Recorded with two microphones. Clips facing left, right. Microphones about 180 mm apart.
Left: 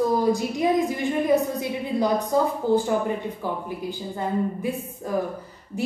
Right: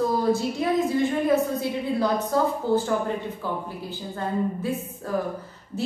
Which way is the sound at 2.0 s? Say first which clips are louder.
Left 2 dB; 15° left (ahead or behind).